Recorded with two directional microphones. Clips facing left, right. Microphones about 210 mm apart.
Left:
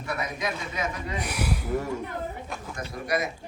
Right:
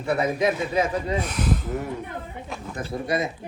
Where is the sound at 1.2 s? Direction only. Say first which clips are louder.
Right 4 dB; 10° left (ahead or behind).